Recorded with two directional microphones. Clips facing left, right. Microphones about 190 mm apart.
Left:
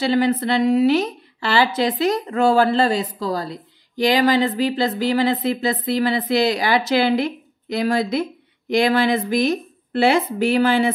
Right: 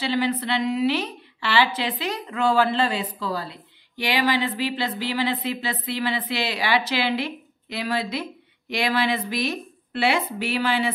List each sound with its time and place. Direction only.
0.0 s a woman's voice: 45° left (ahead or behind)